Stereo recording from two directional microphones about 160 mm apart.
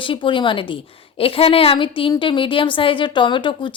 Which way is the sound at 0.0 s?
30° left (ahead or behind).